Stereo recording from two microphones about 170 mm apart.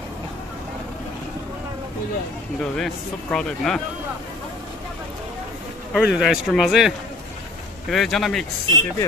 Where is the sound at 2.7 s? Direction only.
5° left (ahead or behind).